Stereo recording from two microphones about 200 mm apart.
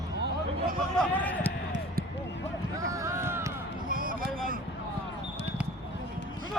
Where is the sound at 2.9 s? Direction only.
15° right (ahead or behind).